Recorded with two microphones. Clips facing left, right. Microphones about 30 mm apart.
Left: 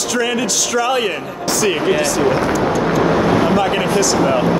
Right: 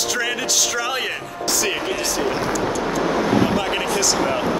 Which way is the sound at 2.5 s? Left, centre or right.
Centre.